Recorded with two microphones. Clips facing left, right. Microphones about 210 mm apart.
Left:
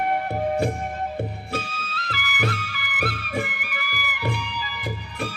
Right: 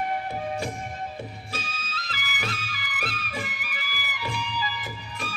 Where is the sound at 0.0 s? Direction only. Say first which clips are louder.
Left 5 dB; 60° left (ahead or behind).